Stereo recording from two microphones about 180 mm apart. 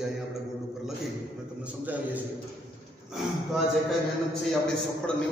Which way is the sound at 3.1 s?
Centre (ahead or behind).